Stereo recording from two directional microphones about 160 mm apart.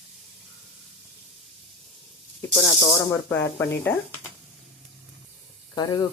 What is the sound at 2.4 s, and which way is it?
Speech, 15° left (ahead or behind).